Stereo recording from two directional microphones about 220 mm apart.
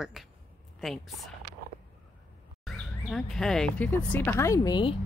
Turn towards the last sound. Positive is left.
turn(degrees=20)  # may be behind; listen again after turning